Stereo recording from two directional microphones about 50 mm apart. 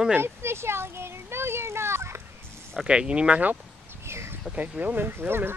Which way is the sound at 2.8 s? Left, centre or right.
Centre.